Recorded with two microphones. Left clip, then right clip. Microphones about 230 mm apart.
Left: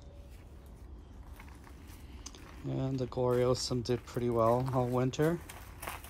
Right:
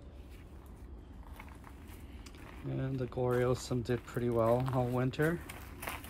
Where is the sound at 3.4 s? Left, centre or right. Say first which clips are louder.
Left 3 dB; centre.